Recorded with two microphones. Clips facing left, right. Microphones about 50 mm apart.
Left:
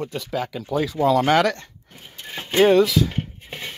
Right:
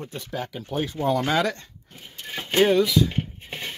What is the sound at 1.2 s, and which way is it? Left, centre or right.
Speech, left.